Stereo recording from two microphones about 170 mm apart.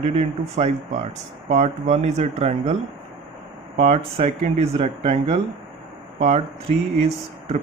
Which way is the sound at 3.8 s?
40° right (ahead or behind).